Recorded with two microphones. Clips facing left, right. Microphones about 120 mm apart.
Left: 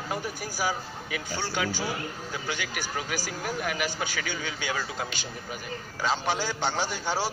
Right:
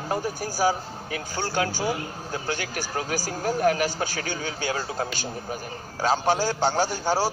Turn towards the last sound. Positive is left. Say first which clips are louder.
# right 5 dB
turn(degrees=-35)  # may be behind; listen again after turning